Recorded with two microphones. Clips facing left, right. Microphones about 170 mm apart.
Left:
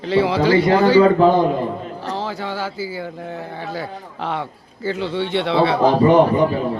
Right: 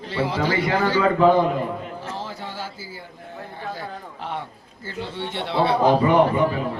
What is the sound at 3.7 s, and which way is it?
A man's voice, 90° left.